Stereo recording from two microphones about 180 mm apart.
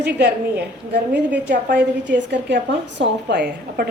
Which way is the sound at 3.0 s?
60° right (ahead or behind).